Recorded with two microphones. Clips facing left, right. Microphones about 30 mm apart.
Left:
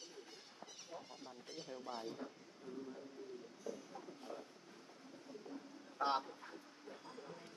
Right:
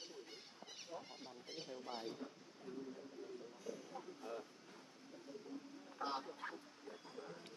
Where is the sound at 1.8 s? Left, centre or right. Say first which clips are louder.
Left 1 dB; centre.